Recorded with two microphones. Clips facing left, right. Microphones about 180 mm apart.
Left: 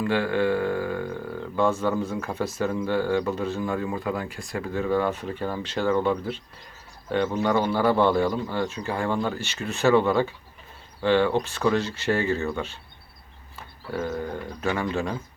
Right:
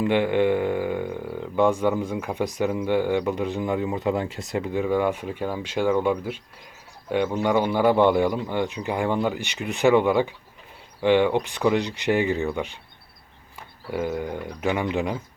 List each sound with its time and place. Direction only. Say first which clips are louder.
0.0 s speech: right 3 dB; 20° right (ahead or behind)
13.9 s speech: right 2 dB; 15° right (ahead or behind)